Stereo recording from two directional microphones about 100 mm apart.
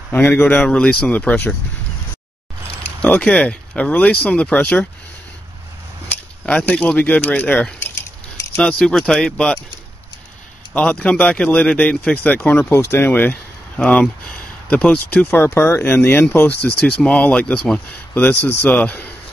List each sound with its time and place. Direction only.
0.1 s speech: 20° left (ahead or behind)
0.7 s speech: 10° left (ahead or behind)
3.0 s speech: 10° left (ahead or behind)
6.0 s speech: 15° left (ahead or behind)
8.7 s speech: 5° left (ahead or behind)
10.7 s speech: 15° left (ahead or behind)